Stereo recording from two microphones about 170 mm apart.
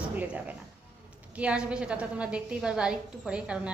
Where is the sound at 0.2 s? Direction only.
10° right (ahead or behind).